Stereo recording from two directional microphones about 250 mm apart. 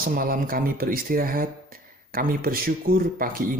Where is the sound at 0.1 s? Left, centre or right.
Right.